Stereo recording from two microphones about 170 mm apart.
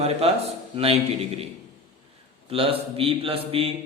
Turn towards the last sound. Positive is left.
turn(degrees=-35)  # may be behind; listen again after turning